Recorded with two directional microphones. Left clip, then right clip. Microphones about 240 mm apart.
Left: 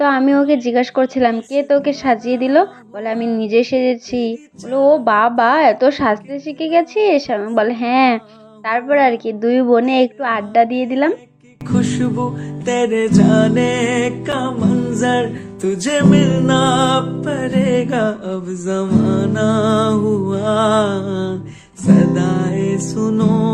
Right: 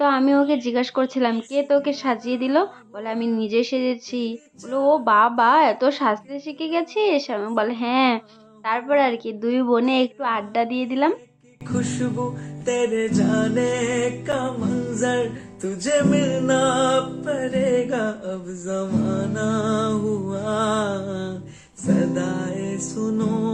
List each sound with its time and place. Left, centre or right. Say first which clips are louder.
0.0 s a woman's voice: left 4 dB; centre
11.8 s music: left 6 dB; left